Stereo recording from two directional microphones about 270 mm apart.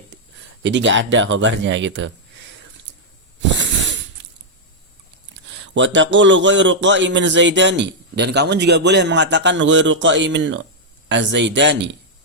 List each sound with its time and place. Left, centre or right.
0.6 s speech: right
3.5 s a sound: right
5.6 s a man's voice: right